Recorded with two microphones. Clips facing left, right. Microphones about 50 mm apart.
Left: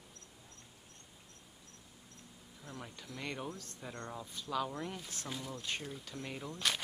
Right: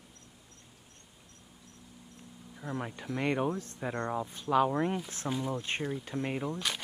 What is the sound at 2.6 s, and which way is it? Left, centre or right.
Speech, right.